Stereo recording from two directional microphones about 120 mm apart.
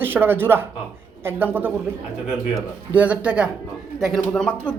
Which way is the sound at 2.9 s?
10° right (ahead or behind).